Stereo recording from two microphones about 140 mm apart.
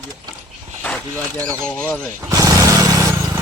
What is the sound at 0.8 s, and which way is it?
Speech, 10° left (ahead or behind).